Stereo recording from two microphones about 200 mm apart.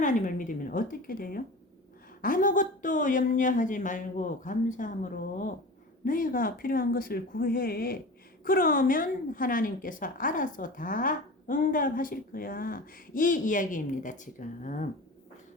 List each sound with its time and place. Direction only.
0.0 s a woman's voice: 40° left (ahead or behind)